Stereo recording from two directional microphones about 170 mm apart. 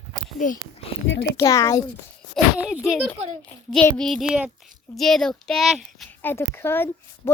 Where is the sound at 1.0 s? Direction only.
90° left.